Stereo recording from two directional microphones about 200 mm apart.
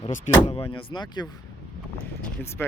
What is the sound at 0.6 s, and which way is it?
Speech, 20° left (ahead or behind).